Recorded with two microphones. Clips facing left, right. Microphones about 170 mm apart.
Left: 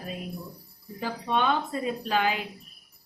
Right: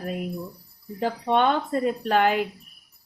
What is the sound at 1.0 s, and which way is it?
A woman's voice, 55° right (ahead or behind).